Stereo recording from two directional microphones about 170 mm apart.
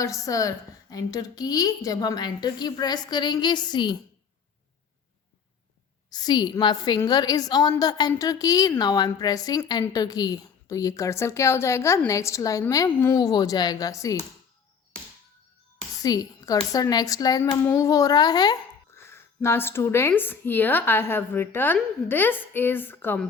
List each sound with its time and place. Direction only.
0.3 s a woman's voice: 20° left (ahead or behind)
6.1 s a woman's voice: 25° left (ahead or behind)
16.0 s a woman's voice: 20° left (ahead or behind)